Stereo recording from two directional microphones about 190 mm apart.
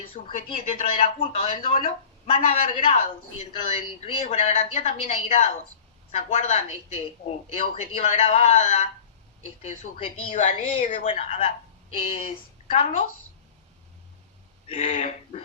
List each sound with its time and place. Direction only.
0.3 s speech: 40° left (ahead or behind)
12.6 s a woman's voice: 35° left (ahead or behind)
14.7 s speech: 35° left (ahead or behind)